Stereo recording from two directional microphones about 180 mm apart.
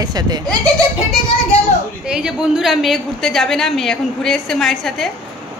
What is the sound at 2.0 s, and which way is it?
A woman's voice, 5° right (ahead or behind).